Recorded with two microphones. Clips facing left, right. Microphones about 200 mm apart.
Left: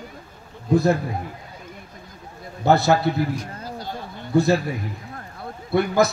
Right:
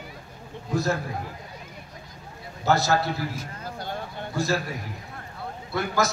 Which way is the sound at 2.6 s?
60° left (ahead or behind).